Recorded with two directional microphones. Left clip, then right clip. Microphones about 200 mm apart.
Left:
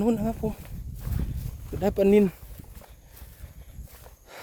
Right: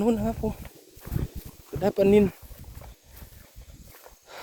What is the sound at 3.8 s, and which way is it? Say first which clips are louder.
Horse: right 2 dB; centre (ahead or behind).